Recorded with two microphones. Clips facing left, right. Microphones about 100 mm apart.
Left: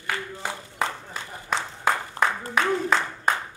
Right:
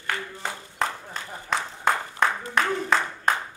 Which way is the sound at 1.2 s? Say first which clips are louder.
Right 1 dB; 5° left (ahead or behind).